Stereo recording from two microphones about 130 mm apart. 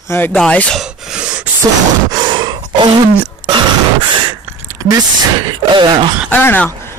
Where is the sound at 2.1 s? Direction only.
35° right (ahead or behind).